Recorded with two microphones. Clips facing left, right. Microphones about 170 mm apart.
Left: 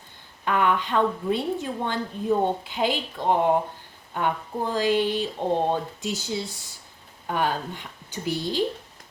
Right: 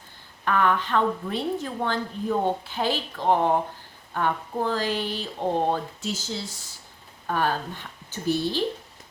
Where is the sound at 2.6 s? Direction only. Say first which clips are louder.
Left 1 dB; 15° left (ahead or behind).